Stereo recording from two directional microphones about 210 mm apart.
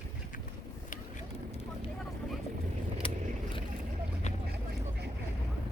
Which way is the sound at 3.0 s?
25° left (ahead or behind).